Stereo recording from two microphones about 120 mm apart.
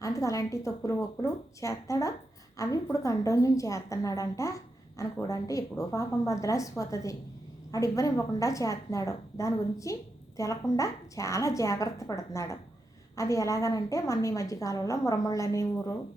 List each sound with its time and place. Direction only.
0.0 s a woman's voice: 30° left (ahead or behind)